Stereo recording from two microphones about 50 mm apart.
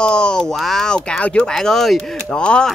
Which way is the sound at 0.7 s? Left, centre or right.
Centre.